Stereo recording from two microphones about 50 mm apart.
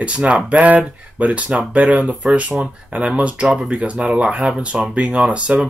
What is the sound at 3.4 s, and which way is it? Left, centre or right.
Speech, centre.